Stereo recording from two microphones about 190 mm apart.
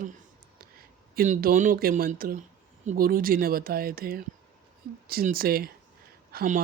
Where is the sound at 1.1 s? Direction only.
50° right (ahead or behind).